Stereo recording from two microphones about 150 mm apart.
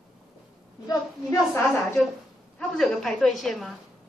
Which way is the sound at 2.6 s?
Centre (ahead or behind).